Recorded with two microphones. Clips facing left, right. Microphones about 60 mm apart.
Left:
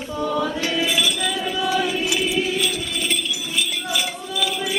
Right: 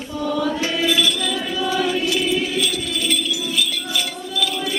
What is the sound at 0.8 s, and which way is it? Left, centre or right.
Music, centre.